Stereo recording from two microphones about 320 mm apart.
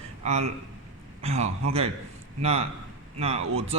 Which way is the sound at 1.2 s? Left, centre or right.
Centre.